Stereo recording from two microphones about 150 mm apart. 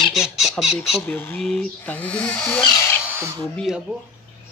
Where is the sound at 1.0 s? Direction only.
10° left (ahead or behind).